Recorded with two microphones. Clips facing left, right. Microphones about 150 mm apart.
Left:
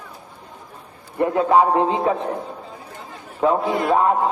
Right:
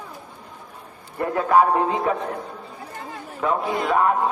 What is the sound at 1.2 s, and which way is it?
Speech, 20° left (ahead or behind).